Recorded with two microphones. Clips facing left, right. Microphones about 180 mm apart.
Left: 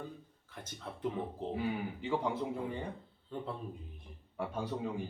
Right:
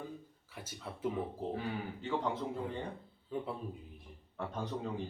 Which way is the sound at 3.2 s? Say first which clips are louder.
Right 2 dB; 5° right (ahead or behind).